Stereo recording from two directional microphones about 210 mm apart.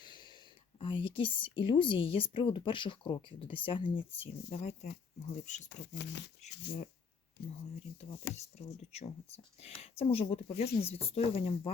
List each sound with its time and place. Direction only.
0.0 s wheeze: 20° left (ahead or behind)
0.8 s a woman's voice: 25° left (ahead or behind)
5.6 s speech: 55° left (ahead or behind)
6.4 s speech: 35° left (ahead or behind)
8.3 s a woman's voice: 30° left (ahead or behind)